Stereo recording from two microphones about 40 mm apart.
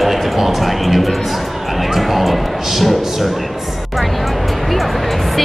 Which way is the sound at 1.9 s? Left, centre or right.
Centre.